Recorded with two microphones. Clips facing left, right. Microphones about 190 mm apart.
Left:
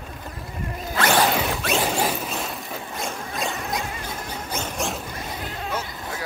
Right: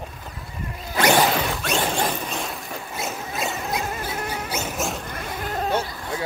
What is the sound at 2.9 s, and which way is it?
Music, 5° right (ahead or behind).